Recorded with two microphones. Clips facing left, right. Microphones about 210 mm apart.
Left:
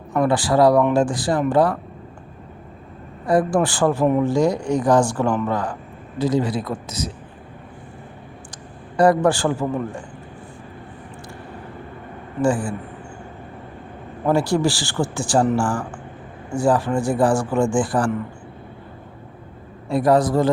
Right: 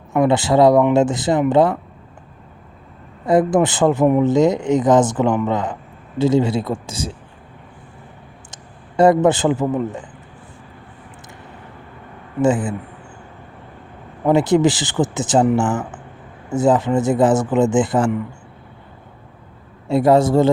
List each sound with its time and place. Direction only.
0.2 s speech: 25° right (ahead or behind)
3.2 s speech: 20° right (ahead or behind)
9.0 s speech: 20° right (ahead or behind)
12.4 s speech: 20° right (ahead or behind)
14.3 s speech: 20° right (ahead or behind)
19.9 s speech: 25° right (ahead or behind)